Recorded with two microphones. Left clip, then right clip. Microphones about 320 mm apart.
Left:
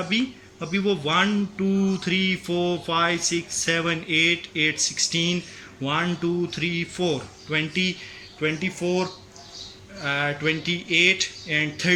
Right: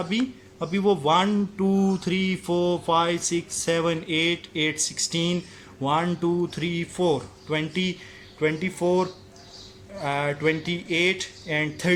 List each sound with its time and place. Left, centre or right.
0.1 s speech: centre
10.0 s speech: centre